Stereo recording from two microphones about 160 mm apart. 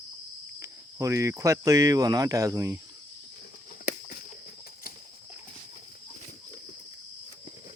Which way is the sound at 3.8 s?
75° left (ahead or behind).